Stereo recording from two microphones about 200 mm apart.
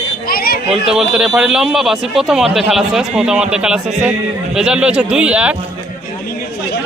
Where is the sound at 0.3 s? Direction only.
50° left (ahead or behind).